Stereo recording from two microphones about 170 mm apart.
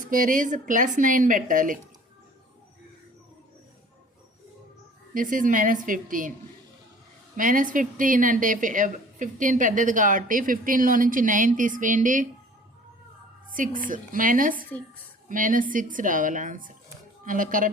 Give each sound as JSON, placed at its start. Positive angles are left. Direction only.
{"t": 0.1, "sound": "a woman's voice", "side_deg": -50}
{"t": 5.1, "sound": "a woman's voice", "side_deg": -50}
{"t": 7.3, "sound": "a woman's voice", "side_deg": -50}
{"t": 13.5, "sound": "a woman's voice", "side_deg": -50}